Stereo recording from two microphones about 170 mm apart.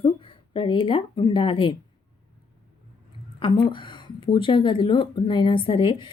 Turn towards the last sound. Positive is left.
turn(degrees=30)  # may be behind; listen again after turning